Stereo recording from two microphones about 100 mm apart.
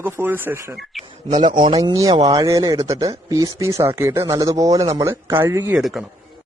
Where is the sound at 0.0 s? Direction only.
20° right (ahead or behind).